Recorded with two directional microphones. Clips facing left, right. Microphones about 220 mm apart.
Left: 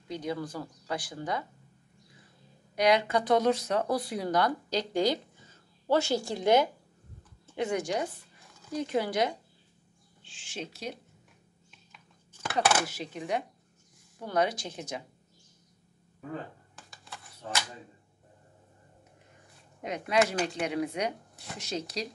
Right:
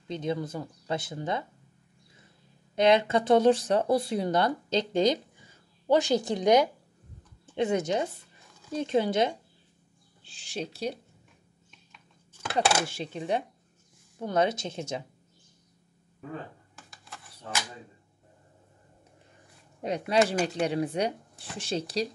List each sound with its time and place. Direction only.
0.1 s speech: 25° right (ahead or behind)
2.7 s speech: 25° right (ahead or behind)
10.2 s speech: 35° right (ahead or behind)
12.5 s speech: 30° right (ahead or behind)
20.1 s speech: 30° right (ahead or behind)
20.3 s speech: centre (ahead or behind)
20.6 s speech: 30° right (ahead or behind)